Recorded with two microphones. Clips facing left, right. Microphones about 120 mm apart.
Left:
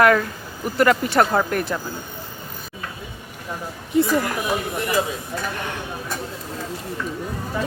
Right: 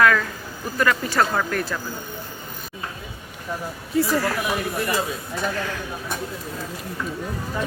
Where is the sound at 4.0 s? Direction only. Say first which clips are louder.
Left 2 dB; 20° left (ahead or behind).